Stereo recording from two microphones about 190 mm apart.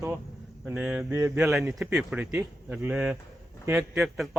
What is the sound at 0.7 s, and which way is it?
Speech, 5° right (ahead or behind).